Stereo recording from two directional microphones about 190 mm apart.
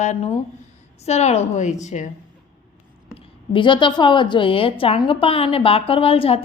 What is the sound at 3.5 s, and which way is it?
A woman's voice, 25° left (ahead or behind).